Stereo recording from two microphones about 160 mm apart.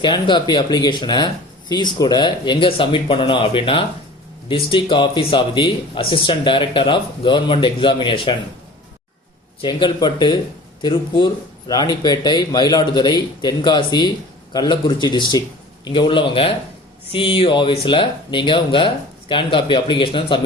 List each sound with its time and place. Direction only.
0.0 s a man's voice: 30° left (ahead or behind)
9.6 s a man's voice: 30° left (ahead or behind)